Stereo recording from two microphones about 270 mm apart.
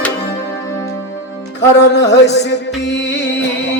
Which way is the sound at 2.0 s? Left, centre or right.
Left.